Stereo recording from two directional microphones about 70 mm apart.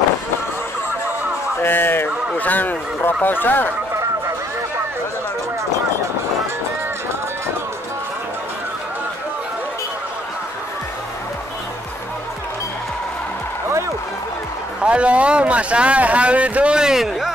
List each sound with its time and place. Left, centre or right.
1.6 s a man's voice: left
14.8 s speech: centre